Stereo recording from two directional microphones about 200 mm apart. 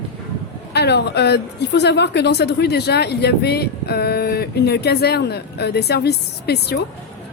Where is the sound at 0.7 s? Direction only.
55° left (ahead or behind).